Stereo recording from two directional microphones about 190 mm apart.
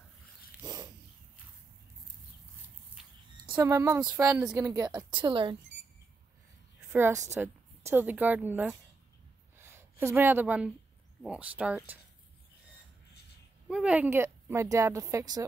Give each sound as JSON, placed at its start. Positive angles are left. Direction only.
{"t": 3.0, "sound": "a sound", "side_deg": -5}
{"t": 3.5, "sound": "a woman's voice", "side_deg": -15}
{"t": 6.9, "sound": "a woman's voice", "side_deg": -10}
{"t": 9.6, "sound": "a sound", "side_deg": -10}
{"t": 11.2, "sound": "a woman's voice", "side_deg": -5}
{"t": 13.7, "sound": "a woman's voice", "side_deg": -5}